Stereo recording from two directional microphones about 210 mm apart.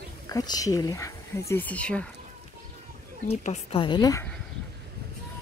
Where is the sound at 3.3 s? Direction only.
25° left (ahead or behind).